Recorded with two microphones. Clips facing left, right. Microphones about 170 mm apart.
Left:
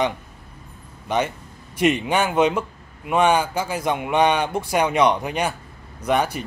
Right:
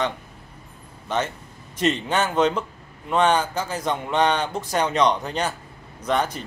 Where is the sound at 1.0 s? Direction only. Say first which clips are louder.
Left 3 dB; 10° left (ahead or behind).